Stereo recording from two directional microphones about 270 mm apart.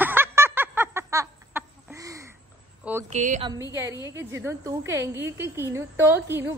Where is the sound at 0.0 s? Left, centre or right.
Centre.